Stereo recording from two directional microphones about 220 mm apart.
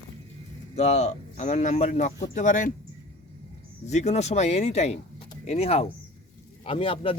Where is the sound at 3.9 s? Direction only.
30° left (ahead or behind).